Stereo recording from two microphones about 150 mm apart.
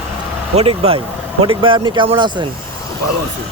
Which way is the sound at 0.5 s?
40° right (ahead or behind).